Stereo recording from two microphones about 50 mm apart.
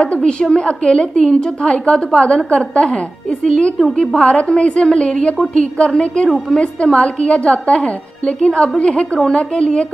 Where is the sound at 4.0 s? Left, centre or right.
Left.